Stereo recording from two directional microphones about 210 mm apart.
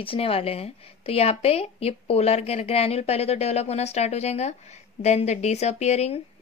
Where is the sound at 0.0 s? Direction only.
25° left (ahead or behind).